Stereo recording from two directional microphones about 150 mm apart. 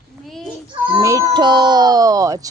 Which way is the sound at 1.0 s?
20° right (ahead or behind).